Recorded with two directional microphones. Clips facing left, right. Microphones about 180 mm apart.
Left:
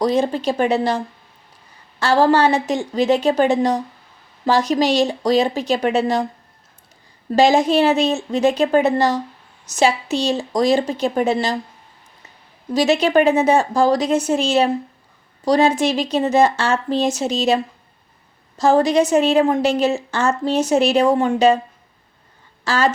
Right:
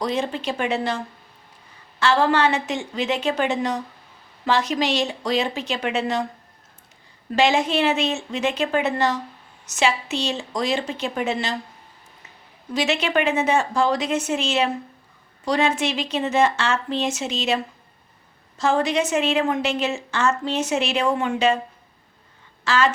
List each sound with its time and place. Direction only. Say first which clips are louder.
0.0 s a woman's voice: left 7 dB; 40° left (ahead or behind)
2.0 s a woman's voice: left 4 dB; 40° left (ahead or behind)
7.3 s a woman's voice: left 5 dB; 35° left (ahead or behind)
12.7 s a woman's voice: left 7 dB; 35° left (ahead or behind)
22.6 s speech: left 2 dB; 40° left (ahead or behind)